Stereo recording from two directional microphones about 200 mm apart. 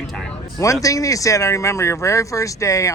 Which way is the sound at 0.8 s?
15° left (ahead or behind).